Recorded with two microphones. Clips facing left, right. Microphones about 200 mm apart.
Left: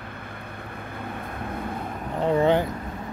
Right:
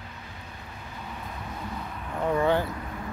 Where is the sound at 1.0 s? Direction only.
55° left (ahead or behind).